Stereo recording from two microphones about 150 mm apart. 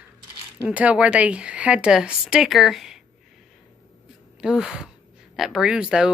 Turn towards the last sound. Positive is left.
turn(degrees=-5)  # may be behind; listen again after turning